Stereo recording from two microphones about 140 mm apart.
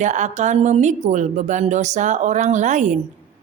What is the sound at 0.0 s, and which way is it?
Speech, 60° right (ahead or behind).